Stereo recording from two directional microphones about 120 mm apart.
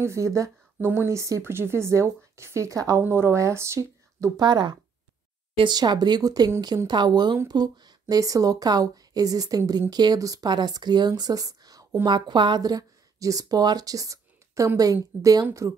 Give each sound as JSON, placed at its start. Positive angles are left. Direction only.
{"t": 0.0, "sound": "speech", "side_deg": -25}
{"t": 4.4, "sound": "speech", "side_deg": -35}